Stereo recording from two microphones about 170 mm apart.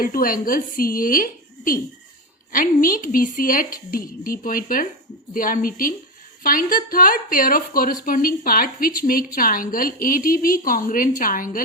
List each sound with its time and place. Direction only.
0.0 s a woman's voice: 55° left (ahead or behind)